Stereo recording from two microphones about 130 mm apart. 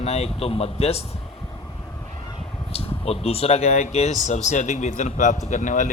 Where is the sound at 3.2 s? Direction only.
50° left (ahead or behind).